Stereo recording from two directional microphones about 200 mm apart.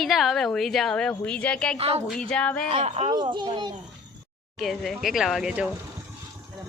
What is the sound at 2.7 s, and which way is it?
Speech, 35° right (ahead or behind).